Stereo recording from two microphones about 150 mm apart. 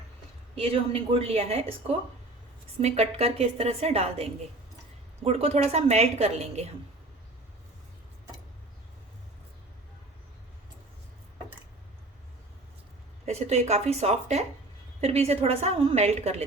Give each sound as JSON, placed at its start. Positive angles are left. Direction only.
{"t": 0.5, "sound": "a woman's voice", "side_deg": -40}
{"t": 13.2, "sound": "a woman's voice", "side_deg": -45}